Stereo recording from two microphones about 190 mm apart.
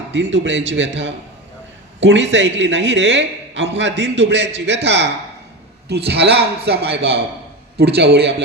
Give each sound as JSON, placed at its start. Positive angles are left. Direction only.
{"t": 0.1, "sound": "a man's voice", "side_deg": -70}
{"t": 6.1, "sound": "speech", "side_deg": -60}